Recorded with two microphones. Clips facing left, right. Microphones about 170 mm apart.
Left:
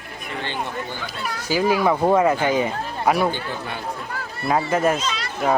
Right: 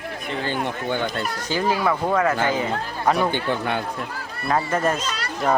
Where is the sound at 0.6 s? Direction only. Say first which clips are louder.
Right 5 dB; 60° right (ahead or behind).